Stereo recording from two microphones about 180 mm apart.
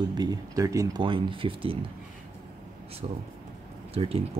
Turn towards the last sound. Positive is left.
turn(degrees=-35)  # may be behind; listen again after turning